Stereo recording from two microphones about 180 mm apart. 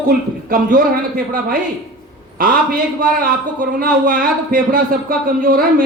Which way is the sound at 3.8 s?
55° right (ahead or behind).